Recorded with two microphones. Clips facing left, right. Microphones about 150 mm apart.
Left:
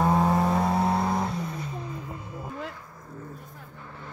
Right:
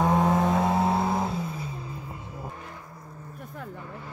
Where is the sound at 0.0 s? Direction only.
Centre (ahead or behind).